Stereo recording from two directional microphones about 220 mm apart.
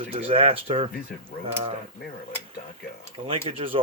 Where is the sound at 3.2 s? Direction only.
25° right (ahead or behind).